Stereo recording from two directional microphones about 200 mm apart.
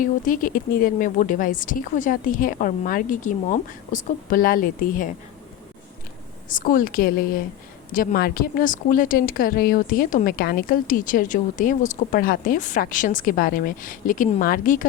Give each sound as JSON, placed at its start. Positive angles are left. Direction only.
{"t": 0.0, "sound": "speech", "side_deg": 40}
{"t": 6.5, "sound": "speech", "side_deg": 45}